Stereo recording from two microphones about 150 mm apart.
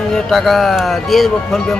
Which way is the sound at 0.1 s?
Centre (ahead or behind).